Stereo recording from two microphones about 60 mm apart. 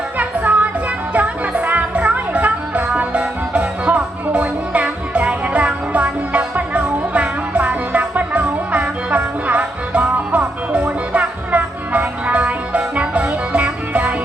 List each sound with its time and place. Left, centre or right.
0.2 s music: right